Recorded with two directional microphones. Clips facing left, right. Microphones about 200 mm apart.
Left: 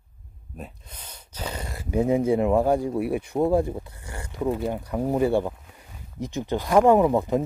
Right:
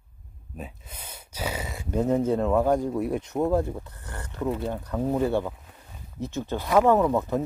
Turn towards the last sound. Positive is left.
turn(degrees=15)  # may be behind; listen again after turning